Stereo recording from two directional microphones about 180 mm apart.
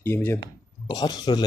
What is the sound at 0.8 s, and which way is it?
Speech, 25° left (ahead or behind).